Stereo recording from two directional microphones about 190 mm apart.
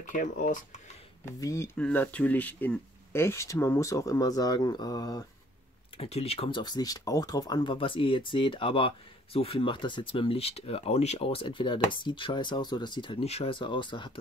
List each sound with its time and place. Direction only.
0.0 s speech: 40° left (ahead or behind)
1.2 s speech: 15° left (ahead or behind)
5.9 s speech: 30° left (ahead or behind)